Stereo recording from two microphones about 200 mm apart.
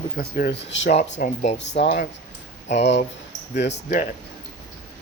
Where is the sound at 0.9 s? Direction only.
35° left (ahead or behind).